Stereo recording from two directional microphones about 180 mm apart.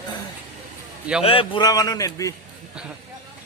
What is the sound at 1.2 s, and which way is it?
A man's voice, 30° left (ahead or behind).